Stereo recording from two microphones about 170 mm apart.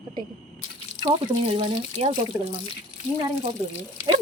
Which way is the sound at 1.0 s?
30° right (ahead or behind).